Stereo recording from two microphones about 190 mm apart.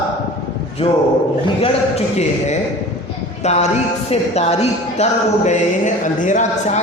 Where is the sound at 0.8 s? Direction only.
30° left (ahead or behind).